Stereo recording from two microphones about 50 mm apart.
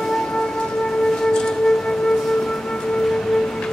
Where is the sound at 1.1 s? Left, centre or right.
Centre.